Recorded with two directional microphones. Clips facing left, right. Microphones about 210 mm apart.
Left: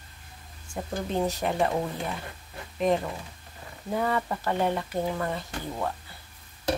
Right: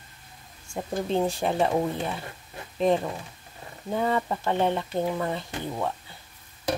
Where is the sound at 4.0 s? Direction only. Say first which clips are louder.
Right 2 dB; 20° right (ahead or behind).